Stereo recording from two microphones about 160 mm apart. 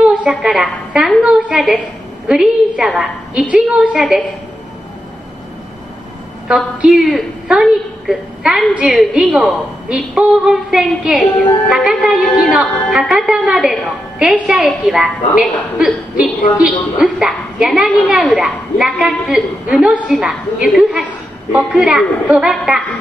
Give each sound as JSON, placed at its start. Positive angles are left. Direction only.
{"t": 0.0, "sound": "a woman's voice", "side_deg": -5}
{"t": 6.4, "sound": "a woman's voice", "side_deg": -5}